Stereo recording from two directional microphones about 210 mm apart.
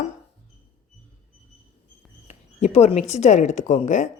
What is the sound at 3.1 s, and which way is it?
Speech, 35° left (ahead or behind).